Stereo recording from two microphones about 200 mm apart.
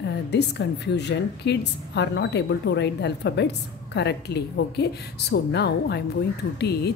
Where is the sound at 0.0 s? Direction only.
60° left (ahead or behind).